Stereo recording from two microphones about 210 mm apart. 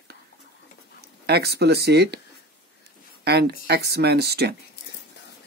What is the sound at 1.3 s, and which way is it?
Speech, 50° right (ahead or behind).